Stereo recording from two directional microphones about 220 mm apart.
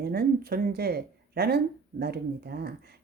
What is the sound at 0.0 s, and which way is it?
Speech, 45° right (ahead or behind).